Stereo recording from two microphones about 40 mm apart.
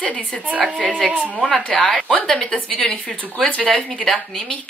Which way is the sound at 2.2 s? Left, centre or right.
Left.